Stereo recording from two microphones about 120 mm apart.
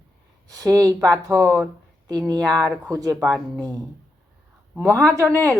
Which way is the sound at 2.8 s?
30° right (ahead or behind).